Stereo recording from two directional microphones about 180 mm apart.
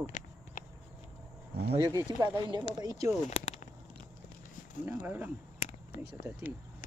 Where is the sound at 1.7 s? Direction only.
20° right (ahead or behind).